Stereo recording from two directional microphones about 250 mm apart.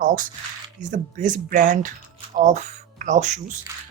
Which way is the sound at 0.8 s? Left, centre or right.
Right.